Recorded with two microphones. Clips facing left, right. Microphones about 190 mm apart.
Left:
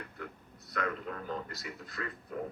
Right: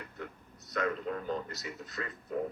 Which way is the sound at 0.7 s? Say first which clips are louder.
Right 3 dB; 20° right (ahead or behind).